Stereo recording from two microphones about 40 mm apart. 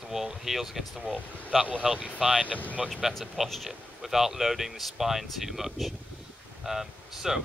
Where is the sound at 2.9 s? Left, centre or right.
Centre.